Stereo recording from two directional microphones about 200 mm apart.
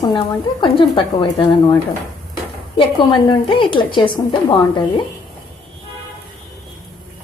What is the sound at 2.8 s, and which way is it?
A woman's voice, 25° left (ahead or behind).